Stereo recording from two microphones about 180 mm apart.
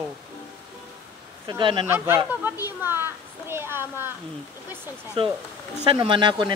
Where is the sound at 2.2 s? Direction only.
10° right (ahead or behind).